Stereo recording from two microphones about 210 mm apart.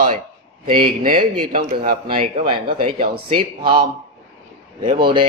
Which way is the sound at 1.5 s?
40° right (ahead or behind).